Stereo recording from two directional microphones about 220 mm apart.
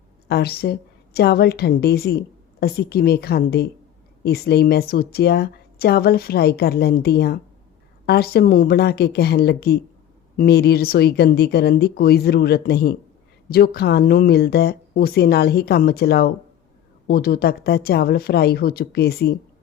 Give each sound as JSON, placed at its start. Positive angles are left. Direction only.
{"t": 0.3, "sound": "a woman's voice", "side_deg": 45}